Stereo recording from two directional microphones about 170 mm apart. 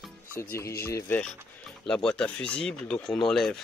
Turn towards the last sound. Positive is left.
turn(degrees=0)  # may be behind; listen again after turning